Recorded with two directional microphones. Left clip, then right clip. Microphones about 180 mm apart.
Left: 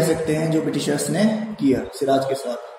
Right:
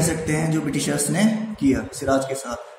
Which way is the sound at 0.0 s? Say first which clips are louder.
Left 4 dB; 45° right (ahead or behind).